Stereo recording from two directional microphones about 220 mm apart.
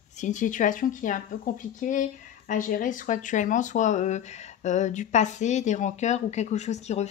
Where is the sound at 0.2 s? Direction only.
35° left (ahead or behind).